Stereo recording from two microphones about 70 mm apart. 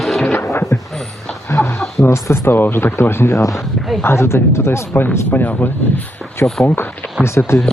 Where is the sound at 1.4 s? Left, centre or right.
Left.